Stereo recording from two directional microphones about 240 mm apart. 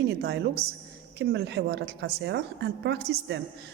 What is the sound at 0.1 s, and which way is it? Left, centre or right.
A woman's voice, right.